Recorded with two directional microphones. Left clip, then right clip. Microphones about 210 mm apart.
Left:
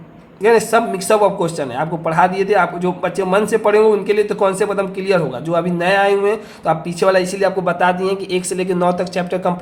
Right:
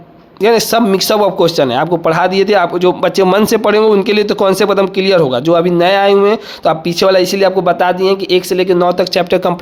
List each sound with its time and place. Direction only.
0.4 s speech: 45° right (ahead or behind)